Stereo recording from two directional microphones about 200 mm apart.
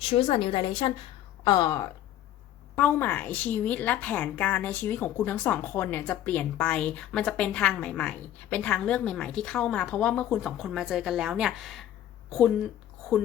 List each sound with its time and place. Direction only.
0.1 s a woman's voice: 30° left (ahead or behind); by 11.9 s centre (ahead or behind)